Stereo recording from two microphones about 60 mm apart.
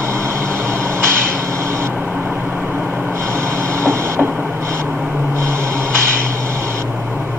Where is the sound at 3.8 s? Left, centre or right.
Right.